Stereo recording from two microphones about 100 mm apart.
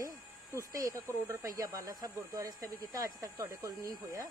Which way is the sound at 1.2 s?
35° right (ahead or behind).